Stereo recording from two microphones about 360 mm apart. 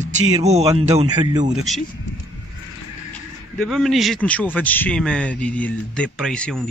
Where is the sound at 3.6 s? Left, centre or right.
Centre.